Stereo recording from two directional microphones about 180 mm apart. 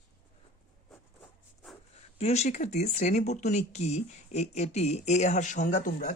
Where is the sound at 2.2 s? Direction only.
35° left (ahead or behind).